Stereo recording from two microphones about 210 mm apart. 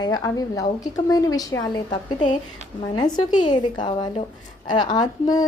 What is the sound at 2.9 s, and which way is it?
A woman's voice, 20° left (ahead or behind).